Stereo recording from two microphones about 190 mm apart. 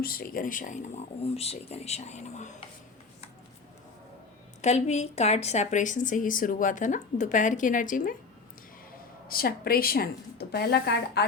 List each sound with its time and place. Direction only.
0.0 s a woman's voice: 50° left (ahead or behind); by 2.5 s 35° left (ahead or behind)
4.6 s a woman's voice: 35° left (ahead or behind)
9.3 s a woman's voice: 50° left (ahead or behind)